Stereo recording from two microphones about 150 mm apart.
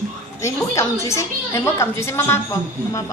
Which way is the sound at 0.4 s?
20° left (ahead or behind).